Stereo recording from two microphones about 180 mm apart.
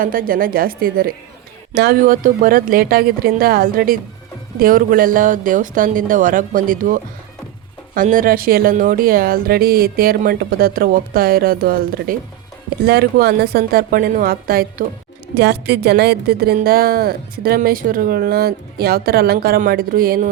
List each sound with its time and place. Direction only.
0.0 s a woman's voice: 50° right (ahead or behind)
15.4 s a woman's voice: 65° right (ahead or behind)